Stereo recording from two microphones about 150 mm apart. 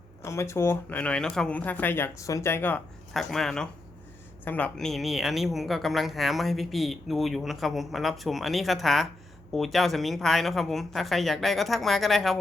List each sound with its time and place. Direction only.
0.2 s speech: 20° left (ahead or behind)
3.1 s speech: centre (ahead or behind)